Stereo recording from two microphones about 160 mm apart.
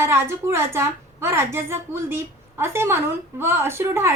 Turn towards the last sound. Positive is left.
turn(degrees=-15)  # may be behind; listen again after turning